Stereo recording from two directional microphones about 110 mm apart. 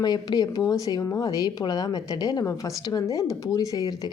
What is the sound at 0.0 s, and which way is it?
Speech, 35° left (ahead or behind).